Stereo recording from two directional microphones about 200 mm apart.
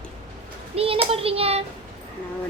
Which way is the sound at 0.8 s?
30° right (ahead or behind).